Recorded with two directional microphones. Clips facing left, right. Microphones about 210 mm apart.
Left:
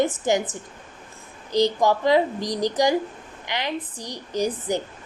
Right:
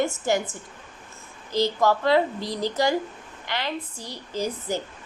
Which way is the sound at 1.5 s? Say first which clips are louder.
Left 2 dB; 15° left (ahead or behind).